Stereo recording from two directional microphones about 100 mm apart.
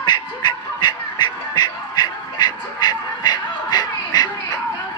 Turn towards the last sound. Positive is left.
turn(degrees=45)  # may be behind; listen again after turning